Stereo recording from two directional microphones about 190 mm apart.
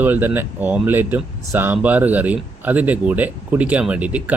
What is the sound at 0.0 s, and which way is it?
Speech, 10° right (ahead or behind).